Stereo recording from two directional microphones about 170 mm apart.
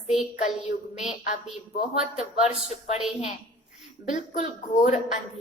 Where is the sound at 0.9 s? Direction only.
45° left (ahead or behind).